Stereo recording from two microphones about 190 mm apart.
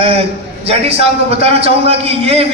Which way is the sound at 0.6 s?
30° right (ahead or behind).